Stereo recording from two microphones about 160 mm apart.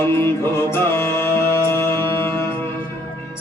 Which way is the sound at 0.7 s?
15° left (ahead or behind).